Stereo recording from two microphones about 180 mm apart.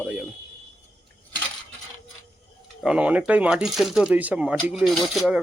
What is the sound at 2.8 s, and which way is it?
Speech, 5° right (ahead or behind).